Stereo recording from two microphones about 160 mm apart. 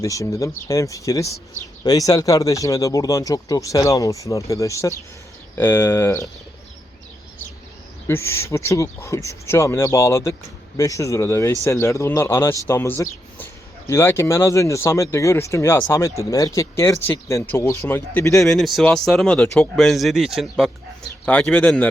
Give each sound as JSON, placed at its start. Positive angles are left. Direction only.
{"t": 0.0, "sound": "a man's voice", "side_deg": 20}
{"t": 8.0, "sound": "a man's voice", "side_deg": 15}
{"t": 18.4, "sound": "a man's voice", "side_deg": 0}